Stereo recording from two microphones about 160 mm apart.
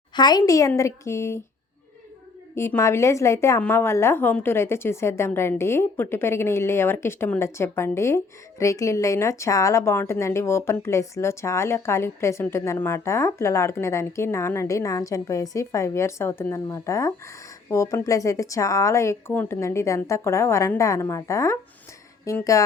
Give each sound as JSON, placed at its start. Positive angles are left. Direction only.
{"t": 0.1, "sound": "a woman's voice", "side_deg": 25}
{"t": 2.6, "sound": "a woman's voice", "side_deg": 15}